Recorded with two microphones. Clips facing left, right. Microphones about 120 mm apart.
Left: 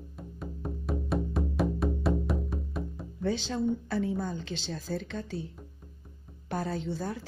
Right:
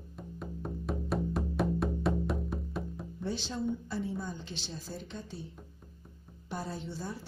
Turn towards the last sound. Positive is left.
turn(degrees=90)